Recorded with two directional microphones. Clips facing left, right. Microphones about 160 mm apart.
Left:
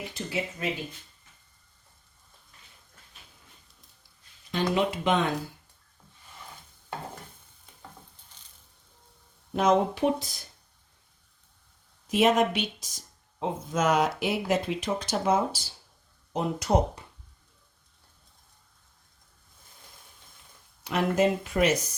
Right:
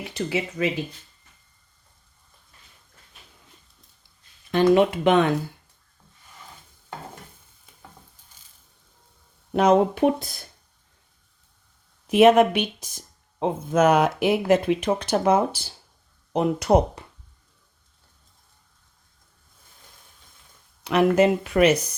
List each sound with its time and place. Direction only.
0.1 s speech: 90° right
4.5 s speech: 60° right (ahead or behind)
9.5 s speech: 65° right (ahead or behind)
12.0 s speech: 60° right (ahead or behind)
20.8 s speech: 70° right (ahead or behind)